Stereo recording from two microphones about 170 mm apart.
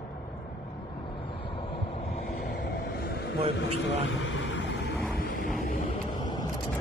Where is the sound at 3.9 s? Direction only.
90° left.